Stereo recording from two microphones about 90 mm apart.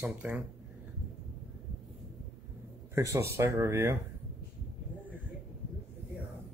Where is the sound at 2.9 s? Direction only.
30° right (ahead or behind).